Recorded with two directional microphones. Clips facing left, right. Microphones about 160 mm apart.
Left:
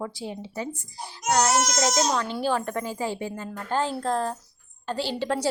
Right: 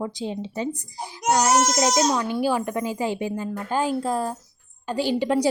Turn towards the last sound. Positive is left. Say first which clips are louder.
# right 6 dB
turn(degrees=-15)  # may be behind; listen again after turning